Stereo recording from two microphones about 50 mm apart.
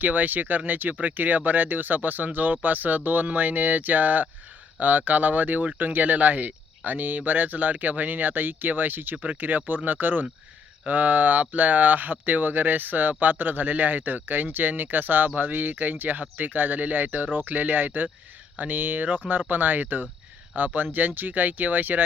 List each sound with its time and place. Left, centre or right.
0.0 s speech: right
9.1 s speech: right
9.4 s speech: right